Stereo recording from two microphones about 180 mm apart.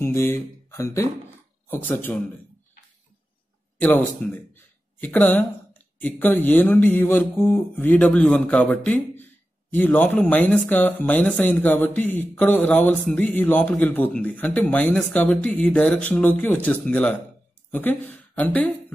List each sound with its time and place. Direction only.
0.0 s speech: 15° left (ahead or behind)
3.8 s speech: 10° left (ahead or behind)